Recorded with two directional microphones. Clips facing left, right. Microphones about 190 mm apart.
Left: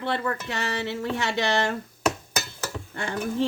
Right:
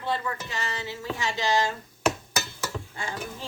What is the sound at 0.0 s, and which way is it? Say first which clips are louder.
Speech: left 3 dB; 65° left (ahead or behind).